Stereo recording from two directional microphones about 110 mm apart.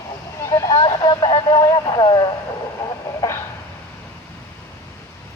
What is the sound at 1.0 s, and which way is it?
Radio, 45° left (ahead or behind).